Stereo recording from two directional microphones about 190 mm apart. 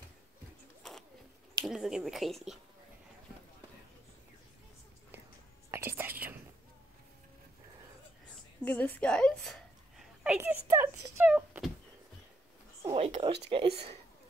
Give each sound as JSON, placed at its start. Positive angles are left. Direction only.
{"t": 1.6, "sound": "speech", "side_deg": 0}
{"t": 5.7, "sound": "whispering", "side_deg": -10}
{"t": 8.6, "sound": "a sound", "side_deg": 10}
{"t": 12.8, "sound": "speech", "side_deg": -35}